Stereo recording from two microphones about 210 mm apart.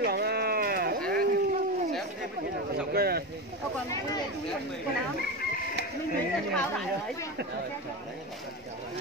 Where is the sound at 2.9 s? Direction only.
45° right (ahead or behind).